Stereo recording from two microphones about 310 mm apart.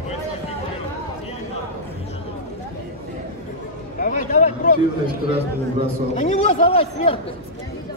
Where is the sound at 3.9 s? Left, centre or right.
Left.